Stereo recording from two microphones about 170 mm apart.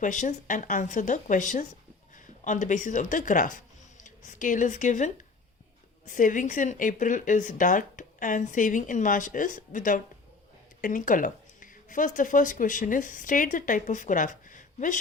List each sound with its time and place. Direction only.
0.0 s a woman's voice: 45° left (ahead or behind)